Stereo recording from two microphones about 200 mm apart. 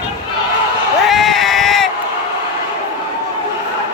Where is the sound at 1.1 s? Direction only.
Centre (ahead or behind).